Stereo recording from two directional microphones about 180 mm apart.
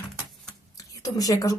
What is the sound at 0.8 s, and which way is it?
Whispering, 20° left (ahead or behind).